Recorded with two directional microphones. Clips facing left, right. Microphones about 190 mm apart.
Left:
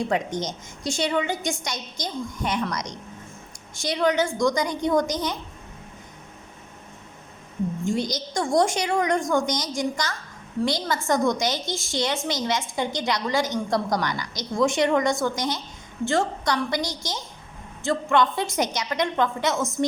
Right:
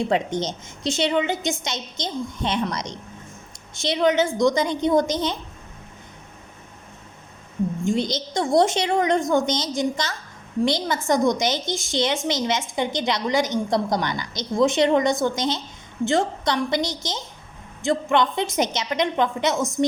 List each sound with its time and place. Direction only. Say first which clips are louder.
0.1 s a woman's voice: right 3 dB; 30° right (ahead or behind)
7.9 s a woman's voice: right 3 dB; 25° right (ahead or behind)